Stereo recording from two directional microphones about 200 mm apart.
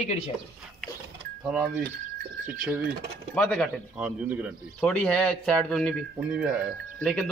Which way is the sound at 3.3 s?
5° left (ahead or behind).